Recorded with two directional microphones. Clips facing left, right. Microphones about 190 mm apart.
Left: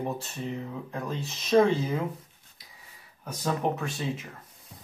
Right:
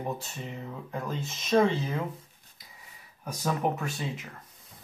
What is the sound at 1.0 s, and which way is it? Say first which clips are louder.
Speech: left 1 dB; 5° right (ahead or behind).